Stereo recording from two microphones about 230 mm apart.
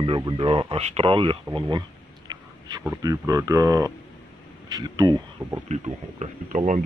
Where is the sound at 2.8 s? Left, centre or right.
Centre.